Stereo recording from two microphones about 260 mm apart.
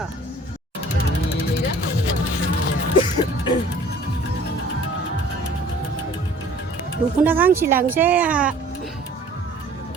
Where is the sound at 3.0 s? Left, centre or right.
Centre.